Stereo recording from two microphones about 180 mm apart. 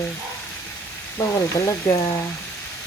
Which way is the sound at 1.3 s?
20° left (ahead or behind).